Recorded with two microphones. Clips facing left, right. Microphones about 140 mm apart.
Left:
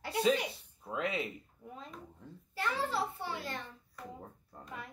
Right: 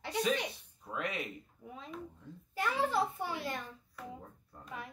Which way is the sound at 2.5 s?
15° right (ahead or behind).